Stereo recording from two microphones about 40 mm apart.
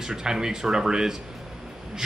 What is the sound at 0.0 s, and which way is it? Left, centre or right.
A man's voice, centre.